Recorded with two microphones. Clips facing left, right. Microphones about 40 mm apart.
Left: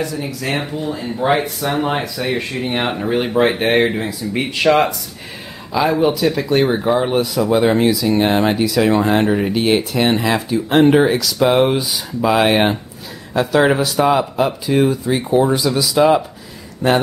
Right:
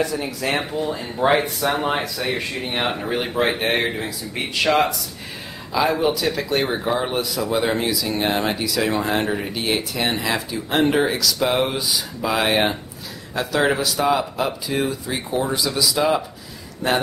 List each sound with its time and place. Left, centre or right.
0.0 s speech: centre